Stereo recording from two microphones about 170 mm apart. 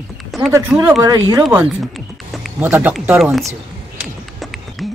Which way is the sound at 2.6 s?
10° right (ahead or behind).